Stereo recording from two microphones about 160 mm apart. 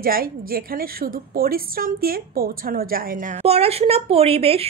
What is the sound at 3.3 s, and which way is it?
Speech, 40° right (ahead or behind).